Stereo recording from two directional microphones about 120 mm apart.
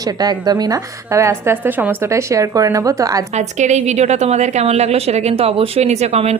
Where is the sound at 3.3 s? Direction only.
75° right (ahead or behind).